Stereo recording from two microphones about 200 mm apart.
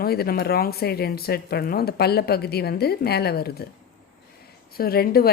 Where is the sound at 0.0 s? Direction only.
50° left (ahead or behind).